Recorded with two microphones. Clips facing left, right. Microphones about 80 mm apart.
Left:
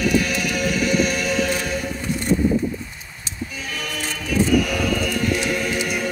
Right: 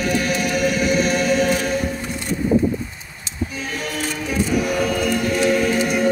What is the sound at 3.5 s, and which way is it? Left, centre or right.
Music, right.